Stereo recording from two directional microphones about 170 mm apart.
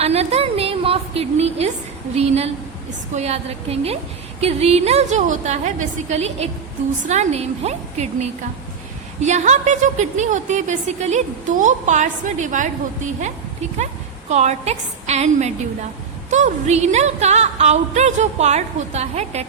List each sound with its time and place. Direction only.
0.0 s a woman's voice: 40° right (ahead or behind)
2.1 s music: 40° right (ahead or behind)
9.2 s a woman's voice: 45° right (ahead or behind)
14.3 s music: 40° right (ahead or behind)